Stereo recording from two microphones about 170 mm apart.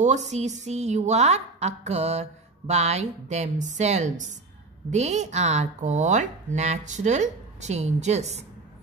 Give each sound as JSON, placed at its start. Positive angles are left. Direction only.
{"t": 0.0, "sound": "a woman's voice", "side_deg": -45}